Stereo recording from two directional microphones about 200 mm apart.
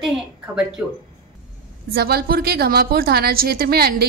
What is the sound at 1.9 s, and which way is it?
A woman's voice, 50° right (ahead or behind).